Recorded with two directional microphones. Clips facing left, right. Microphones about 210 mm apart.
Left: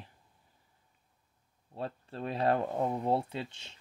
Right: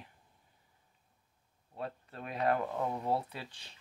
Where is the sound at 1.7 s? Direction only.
30° left (ahead or behind).